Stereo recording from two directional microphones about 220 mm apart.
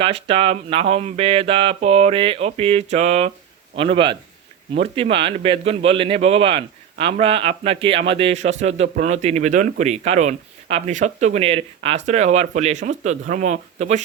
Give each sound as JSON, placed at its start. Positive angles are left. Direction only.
{"t": 0.0, "sound": "a man's voice", "side_deg": -25}